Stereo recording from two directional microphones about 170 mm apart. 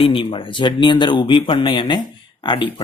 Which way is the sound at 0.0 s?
30° left (ahead or behind).